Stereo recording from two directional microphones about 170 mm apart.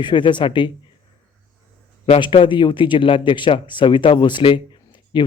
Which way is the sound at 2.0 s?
30° left (ahead or behind).